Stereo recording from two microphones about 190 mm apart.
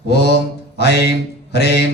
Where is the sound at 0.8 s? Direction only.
60° left (ahead or behind).